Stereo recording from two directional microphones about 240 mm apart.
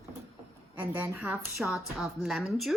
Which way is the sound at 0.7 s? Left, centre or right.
Centre.